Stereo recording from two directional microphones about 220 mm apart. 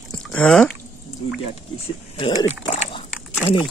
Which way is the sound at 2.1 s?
20° left (ahead or behind).